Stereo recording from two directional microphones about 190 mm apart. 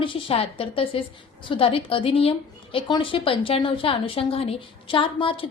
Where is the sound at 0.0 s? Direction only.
30° left (ahead or behind).